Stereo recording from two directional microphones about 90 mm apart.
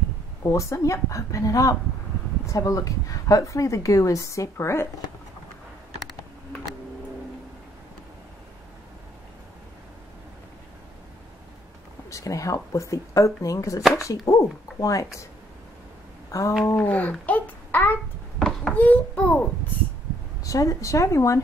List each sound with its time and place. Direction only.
0.5 s speech: 35° left (ahead or behind)
12.1 s speech: 35° left (ahead or behind)
16.3 s a sound: 40° left (ahead or behind)
16.7 s babbling: 20° left (ahead or behind)
18.4 s a sound: 10° left (ahead or behind)
20.4 s speech: 35° left (ahead or behind)